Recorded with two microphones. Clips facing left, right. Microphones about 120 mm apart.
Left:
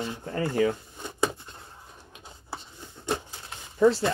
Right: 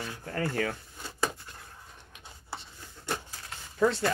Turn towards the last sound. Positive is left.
turn(degrees=20)  # may be behind; listen again after turning